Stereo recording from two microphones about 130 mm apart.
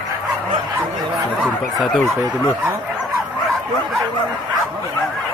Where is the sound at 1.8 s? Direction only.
5° left (ahead or behind).